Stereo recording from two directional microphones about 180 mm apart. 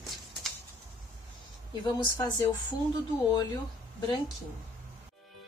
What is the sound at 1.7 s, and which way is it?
Speech, 20° left (ahead or behind).